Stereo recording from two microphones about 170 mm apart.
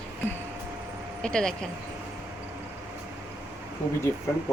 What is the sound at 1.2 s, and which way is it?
Speech, 5° left (ahead or behind).